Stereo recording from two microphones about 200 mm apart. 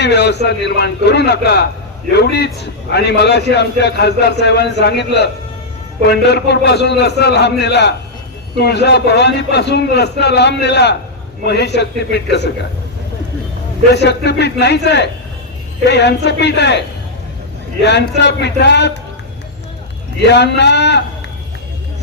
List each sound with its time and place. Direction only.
0.0 s a man's voice: 60° left (ahead or behind)
13.9 s a man's voice: 55° left (ahead or behind)
17.8 s a man's voice: 60° left (ahead or behind)
20.2 s a man's voice: 60° left (ahead or behind)